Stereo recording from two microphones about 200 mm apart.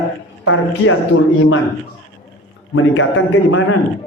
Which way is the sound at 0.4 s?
85° left.